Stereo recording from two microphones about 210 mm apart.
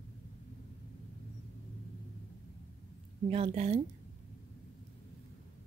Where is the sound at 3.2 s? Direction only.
30° right (ahead or behind).